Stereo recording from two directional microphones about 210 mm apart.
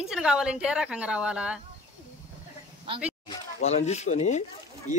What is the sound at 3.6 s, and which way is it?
Speech, 30° left (ahead or behind).